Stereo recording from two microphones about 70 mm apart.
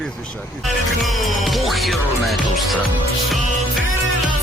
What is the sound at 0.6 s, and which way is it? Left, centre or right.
Music, centre.